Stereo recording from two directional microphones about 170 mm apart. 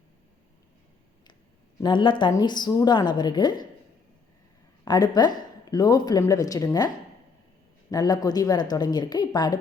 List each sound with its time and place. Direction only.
1.8 s a woman's voice: 25° left (ahead or behind)
4.9 s a woman's voice: 25° left (ahead or behind)